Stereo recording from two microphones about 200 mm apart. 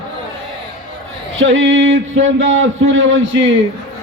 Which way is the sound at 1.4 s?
70° right (ahead or behind).